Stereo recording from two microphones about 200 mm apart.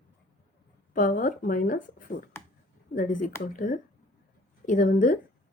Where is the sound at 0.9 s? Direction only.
45° left (ahead or behind).